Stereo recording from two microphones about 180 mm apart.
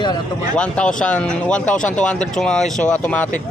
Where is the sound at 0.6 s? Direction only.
5° left (ahead or behind).